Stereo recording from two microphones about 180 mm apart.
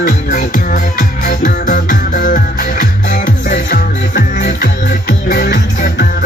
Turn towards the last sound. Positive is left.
turn(degrees=65)  # may be behind; listen again after turning